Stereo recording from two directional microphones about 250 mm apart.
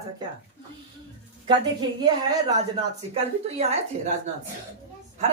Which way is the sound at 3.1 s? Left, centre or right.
Right.